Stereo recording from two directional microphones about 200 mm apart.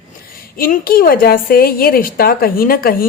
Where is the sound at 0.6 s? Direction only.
45° left (ahead or behind).